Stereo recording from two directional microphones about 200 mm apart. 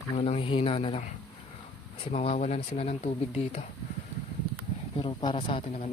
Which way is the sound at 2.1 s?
35° left (ahead or behind).